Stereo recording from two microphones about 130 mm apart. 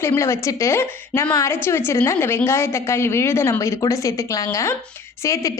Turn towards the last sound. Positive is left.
turn(degrees=25)  # may be behind; listen again after turning